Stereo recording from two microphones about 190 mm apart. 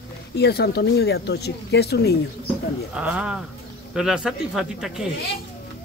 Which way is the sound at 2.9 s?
5° right (ahead or behind).